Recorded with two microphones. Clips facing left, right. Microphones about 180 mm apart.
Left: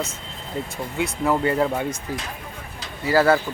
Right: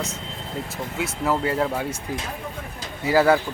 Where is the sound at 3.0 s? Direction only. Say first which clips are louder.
Even; 15° right (ahead or behind).